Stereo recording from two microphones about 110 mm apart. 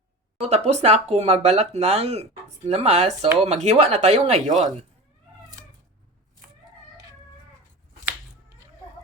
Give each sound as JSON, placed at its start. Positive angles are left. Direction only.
{"t": 0.4, "sound": "speech", "side_deg": -80}